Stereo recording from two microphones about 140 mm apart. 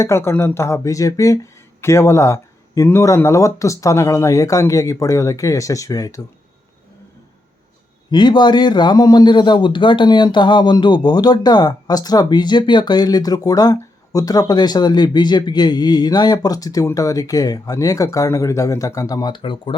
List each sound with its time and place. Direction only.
0.0 s a man's voice: 20° left (ahead or behind)
8.1 s a man's voice: 30° left (ahead or behind)